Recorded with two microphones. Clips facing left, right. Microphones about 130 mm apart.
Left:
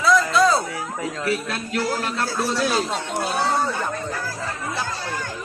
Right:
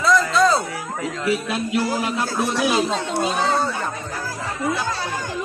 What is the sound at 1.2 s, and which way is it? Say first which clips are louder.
A man's voice: right 5 dB; 10° right (ahead or behind).